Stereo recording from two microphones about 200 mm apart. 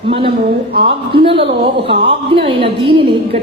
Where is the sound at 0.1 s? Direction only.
25° right (ahead or behind).